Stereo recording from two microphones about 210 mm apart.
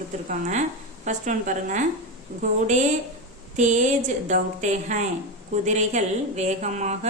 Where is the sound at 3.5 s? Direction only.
35° right (ahead or behind).